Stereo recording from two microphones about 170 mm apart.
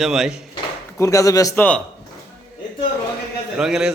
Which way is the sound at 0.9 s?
20° left (ahead or behind).